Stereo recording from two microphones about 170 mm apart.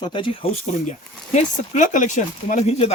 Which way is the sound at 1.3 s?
45° left (ahead or behind).